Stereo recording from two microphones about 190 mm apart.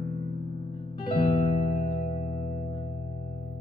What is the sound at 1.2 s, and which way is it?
Music, 45° left (ahead or behind).